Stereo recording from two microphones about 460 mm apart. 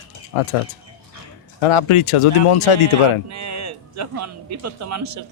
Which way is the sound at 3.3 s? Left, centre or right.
Right.